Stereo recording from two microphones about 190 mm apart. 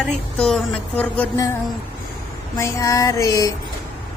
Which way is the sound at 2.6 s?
15° left (ahead or behind).